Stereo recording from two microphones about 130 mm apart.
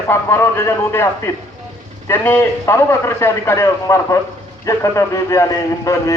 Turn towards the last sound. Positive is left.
turn(degrees=25)  # may be behind; listen again after turning